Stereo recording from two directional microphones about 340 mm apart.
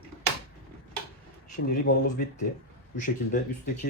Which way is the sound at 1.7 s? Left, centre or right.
Left.